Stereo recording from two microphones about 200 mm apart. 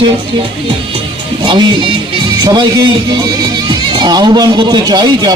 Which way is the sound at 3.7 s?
20° right (ahead or behind).